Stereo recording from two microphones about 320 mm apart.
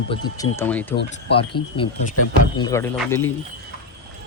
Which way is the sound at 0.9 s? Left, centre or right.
Left.